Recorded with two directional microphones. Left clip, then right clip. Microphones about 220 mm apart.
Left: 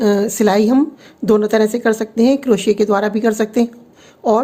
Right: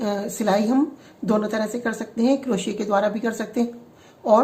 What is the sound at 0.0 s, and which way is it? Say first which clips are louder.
A woman's voice: left 10 dB; 40° left (ahead or behind).